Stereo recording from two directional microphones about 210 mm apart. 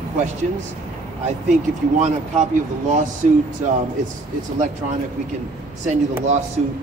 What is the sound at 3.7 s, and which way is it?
Speech, 35° right (ahead or behind).